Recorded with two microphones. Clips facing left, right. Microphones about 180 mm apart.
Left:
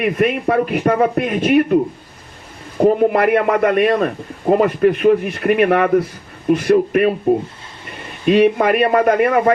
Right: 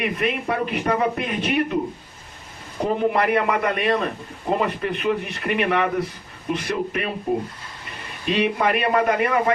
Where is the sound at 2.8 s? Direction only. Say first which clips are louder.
Left 8 dB; 50° left (ahead or behind).